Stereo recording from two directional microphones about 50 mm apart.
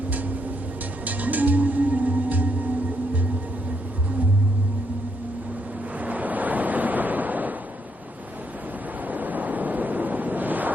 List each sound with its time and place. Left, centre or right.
1.0 s music: right
6.0 s waves: right
9.0 s waves: right